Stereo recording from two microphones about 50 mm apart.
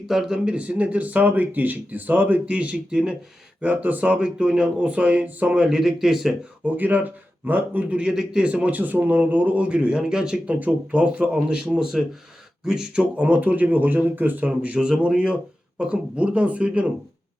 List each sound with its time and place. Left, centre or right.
0.1 s speech: centre
0.4 s speech: right
3.6 s speech: right
5.6 s speech: centre
6.7 s speech: right
8.1 s speech: centre
8.4 s speech: right
10.4 s speech: right